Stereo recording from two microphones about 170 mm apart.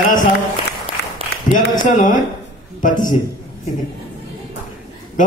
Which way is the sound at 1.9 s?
50° left (ahead or behind).